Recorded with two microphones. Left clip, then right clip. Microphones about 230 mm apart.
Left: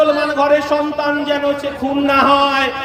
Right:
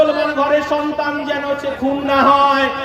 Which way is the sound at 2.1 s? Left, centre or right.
Left.